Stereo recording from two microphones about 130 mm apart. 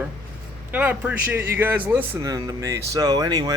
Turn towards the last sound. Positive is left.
turn(degrees=-30)  # may be behind; listen again after turning